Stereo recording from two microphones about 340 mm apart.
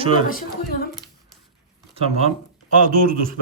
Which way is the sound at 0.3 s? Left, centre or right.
Left.